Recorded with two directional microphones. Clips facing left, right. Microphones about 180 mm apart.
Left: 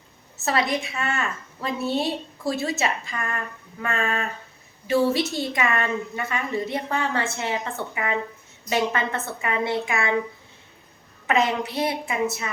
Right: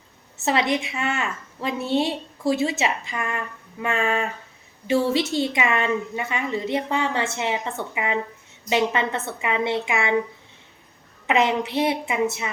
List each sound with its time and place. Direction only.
0.4 s a woman's voice: 20° right (ahead or behind)
11.3 s a woman's voice: 20° right (ahead or behind)